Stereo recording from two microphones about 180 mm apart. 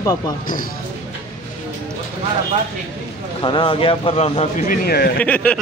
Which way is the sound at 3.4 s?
30° left (ahead or behind).